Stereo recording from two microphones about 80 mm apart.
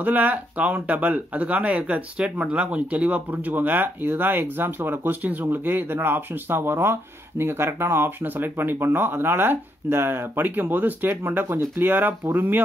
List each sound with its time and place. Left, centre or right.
0.0 s speech: right